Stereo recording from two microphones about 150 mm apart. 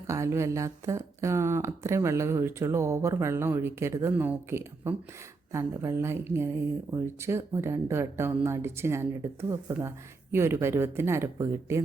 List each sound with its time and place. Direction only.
0.1 s speech: 20° right (ahead or behind)